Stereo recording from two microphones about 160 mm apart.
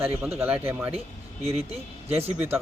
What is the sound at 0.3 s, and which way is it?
Speech, 15° right (ahead or behind).